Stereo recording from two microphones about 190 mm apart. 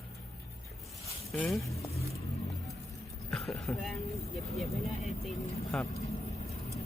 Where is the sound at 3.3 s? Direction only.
Centre (ahead or behind).